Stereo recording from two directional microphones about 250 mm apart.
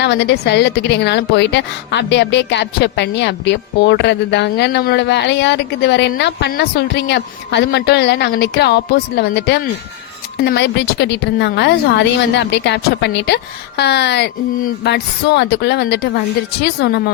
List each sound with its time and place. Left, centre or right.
0.0 s a woman's voice: left